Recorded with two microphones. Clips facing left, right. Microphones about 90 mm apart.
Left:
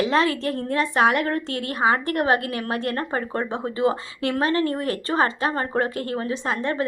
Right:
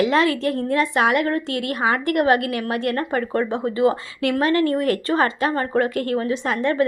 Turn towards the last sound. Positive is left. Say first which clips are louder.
# right 4 dB
turn(degrees=25)  # may be behind; listen again after turning